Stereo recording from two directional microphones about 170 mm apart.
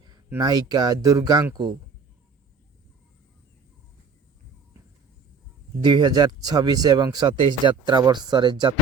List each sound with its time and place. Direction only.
0.3 s speech: 25° right (ahead or behind)
5.8 s speech: 25° right (ahead or behind)